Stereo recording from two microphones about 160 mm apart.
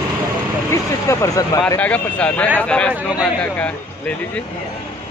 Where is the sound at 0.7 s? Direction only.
20° left (ahead or behind).